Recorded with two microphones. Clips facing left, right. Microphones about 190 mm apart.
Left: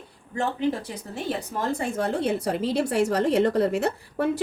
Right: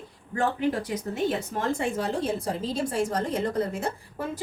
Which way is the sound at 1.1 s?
35° left (ahead or behind).